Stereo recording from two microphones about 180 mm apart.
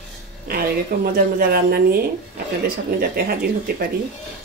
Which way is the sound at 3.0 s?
60° right (ahead or behind).